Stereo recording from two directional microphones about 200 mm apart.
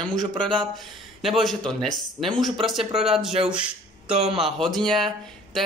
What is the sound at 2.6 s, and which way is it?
Speech, centre (ahead or behind).